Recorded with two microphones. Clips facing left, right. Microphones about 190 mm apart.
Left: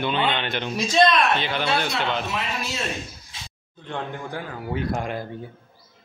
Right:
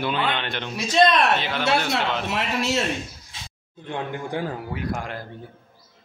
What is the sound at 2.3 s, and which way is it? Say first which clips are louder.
Speech: right 4 dB; 75° right (ahead or behind).